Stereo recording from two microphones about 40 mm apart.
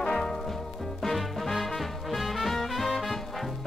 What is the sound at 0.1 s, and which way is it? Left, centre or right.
Music, centre.